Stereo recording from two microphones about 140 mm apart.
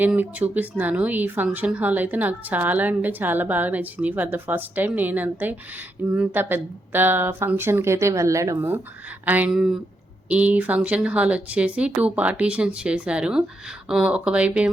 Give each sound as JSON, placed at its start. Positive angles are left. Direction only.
{"t": 0.0, "sound": "a woman's voice", "side_deg": -10}